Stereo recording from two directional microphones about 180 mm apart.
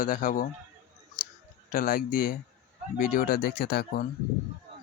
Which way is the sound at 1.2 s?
50° left (ahead or behind).